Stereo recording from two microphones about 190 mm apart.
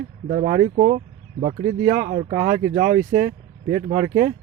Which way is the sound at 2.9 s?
50° right (ahead or behind).